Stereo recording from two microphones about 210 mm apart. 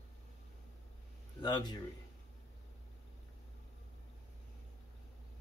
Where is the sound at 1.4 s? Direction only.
20° left (ahead or behind).